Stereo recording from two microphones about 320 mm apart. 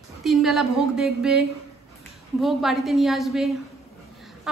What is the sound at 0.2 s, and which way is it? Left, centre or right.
A woman's voice, centre.